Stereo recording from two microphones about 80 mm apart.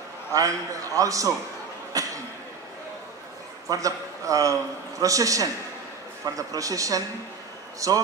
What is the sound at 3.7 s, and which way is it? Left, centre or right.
A man's voice, right.